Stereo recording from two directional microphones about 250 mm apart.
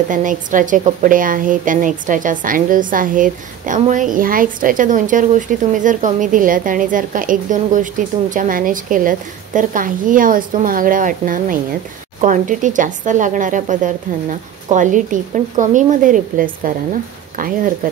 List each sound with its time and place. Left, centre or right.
0.1 s a woman's voice: right